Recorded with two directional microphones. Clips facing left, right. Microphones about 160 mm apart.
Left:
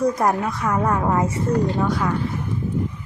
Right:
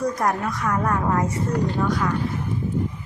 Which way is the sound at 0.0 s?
25° left (ahead or behind).